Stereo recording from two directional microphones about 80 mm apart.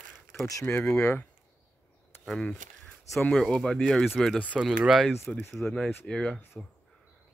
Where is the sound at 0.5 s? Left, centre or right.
Left.